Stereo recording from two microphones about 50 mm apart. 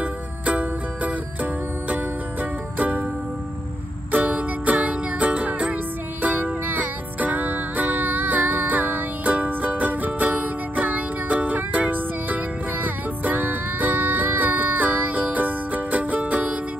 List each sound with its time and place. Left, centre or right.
0.0 s music: right
4.1 s music: right